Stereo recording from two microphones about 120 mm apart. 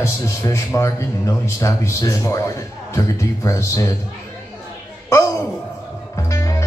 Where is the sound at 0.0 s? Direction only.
25° left (ahead or behind).